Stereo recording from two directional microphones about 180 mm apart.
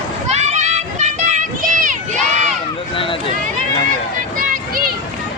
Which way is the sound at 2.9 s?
30° left (ahead or behind).